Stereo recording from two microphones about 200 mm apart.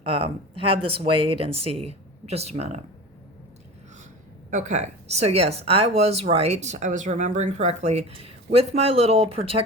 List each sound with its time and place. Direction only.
0.0 s speech: 30° right (ahead or behind)
4.5 s speech: 35° right (ahead or behind)